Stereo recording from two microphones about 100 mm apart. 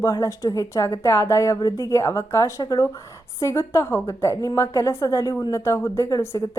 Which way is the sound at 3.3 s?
30° left (ahead or behind).